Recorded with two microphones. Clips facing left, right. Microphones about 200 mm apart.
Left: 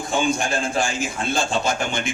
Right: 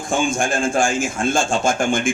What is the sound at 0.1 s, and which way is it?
Speech, 50° right (ahead or behind).